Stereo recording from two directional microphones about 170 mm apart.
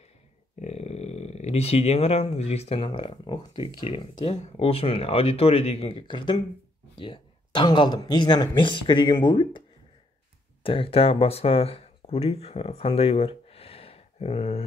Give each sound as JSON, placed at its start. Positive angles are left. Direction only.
{"t": 0.6, "sound": "speech", "side_deg": 40}
{"t": 10.6, "sound": "speech", "side_deg": 30}